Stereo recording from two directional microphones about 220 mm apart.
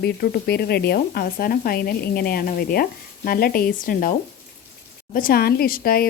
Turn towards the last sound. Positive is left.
turn(degrees=45)  # may be behind; listen again after turning